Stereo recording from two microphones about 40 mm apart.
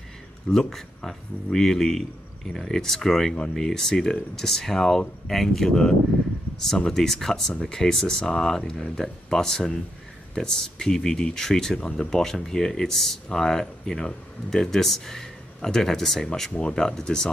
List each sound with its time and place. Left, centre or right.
0.5 s speech: centre
16.3 s speech: centre